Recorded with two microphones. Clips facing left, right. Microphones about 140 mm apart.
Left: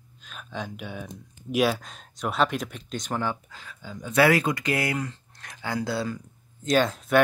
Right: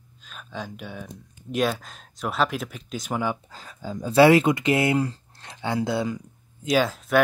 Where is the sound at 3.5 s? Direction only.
35° right (ahead or behind).